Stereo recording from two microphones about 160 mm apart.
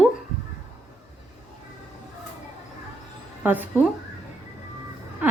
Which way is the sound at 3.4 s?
10° right (ahead or behind).